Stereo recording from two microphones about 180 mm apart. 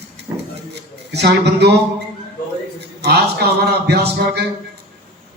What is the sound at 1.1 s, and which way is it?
Speech, 70° right (ahead or behind).